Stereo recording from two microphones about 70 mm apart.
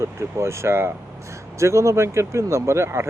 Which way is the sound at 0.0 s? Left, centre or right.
Right.